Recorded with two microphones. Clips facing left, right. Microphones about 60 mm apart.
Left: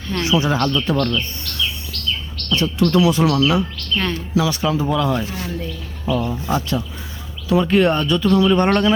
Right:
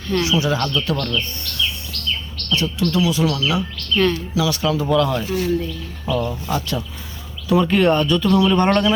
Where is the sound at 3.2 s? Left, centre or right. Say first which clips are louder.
Left 4 dB; left.